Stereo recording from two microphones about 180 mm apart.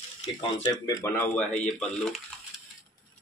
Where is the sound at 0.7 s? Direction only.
15° left (ahead or behind).